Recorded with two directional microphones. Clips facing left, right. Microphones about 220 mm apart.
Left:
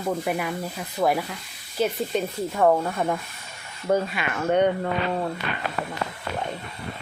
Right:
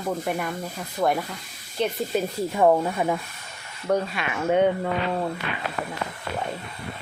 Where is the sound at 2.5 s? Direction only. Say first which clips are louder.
Right 1 dB; 10° right (ahead or behind).